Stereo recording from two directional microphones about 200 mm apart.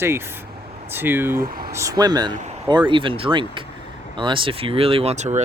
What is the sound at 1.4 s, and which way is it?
Speech, 45° right (ahead or behind).